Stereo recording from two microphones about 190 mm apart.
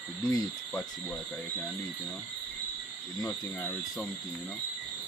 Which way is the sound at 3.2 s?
10° left (ahead or behind).